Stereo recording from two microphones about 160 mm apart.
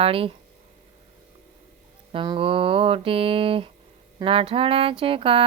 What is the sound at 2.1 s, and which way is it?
Mantra, 35° right (ahead or behind).